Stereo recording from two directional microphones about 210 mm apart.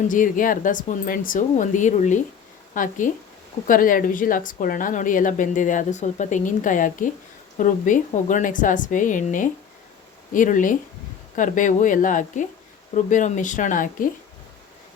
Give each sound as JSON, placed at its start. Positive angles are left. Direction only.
{"t": 0.1, "sound": "a woman's voice", "side_deg": 40}